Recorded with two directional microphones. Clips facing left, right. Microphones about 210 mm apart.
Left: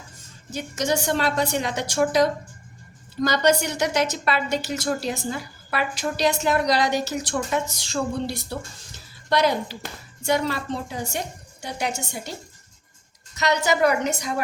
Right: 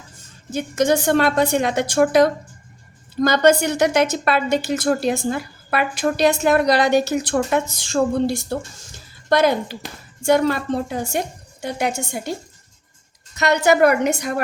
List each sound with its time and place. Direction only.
0.5 s a woman's voice: 55° right (ahead or behind)
13.3 s a woman's voice: 55° right (ahead or behind)